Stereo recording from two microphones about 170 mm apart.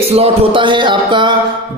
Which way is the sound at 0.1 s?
35° right (ahead or behind).